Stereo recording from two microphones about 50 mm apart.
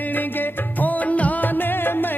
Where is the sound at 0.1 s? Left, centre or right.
Left.